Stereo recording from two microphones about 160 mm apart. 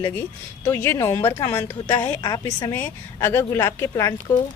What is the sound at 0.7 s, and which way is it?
Speech, 15° left (ahead or behind).